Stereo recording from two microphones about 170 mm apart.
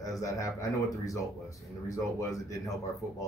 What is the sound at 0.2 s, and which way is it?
Speech, 20° left (ahead or behind).